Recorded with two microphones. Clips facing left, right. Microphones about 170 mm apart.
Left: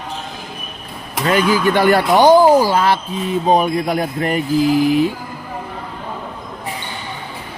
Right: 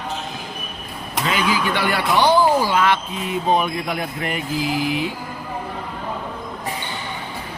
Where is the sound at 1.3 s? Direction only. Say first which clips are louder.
Left 7 dB; 45° left (ahead or behind).